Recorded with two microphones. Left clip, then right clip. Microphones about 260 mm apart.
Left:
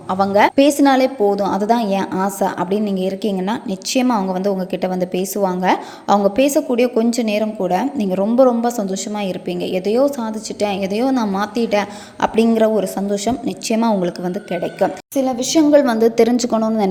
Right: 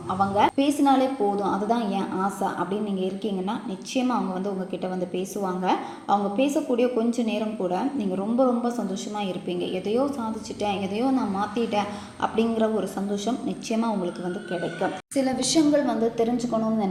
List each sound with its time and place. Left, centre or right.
0.1 s a woman's voice: left
15.2 s a woman's voice: left